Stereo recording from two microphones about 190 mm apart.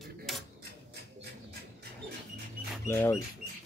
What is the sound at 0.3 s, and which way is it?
Cutlery, centre (ahead or behind).